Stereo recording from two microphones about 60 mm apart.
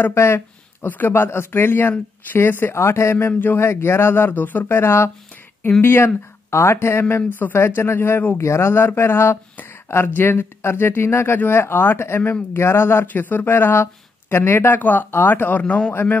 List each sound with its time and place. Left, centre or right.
0.0 s speech: left
0.8 s speech: left
3.6 s speech: left
4.7 s speech: left
7.5 s speech: left
8.4 s speech: left
13.0 s speech: left
15.9 s speech: left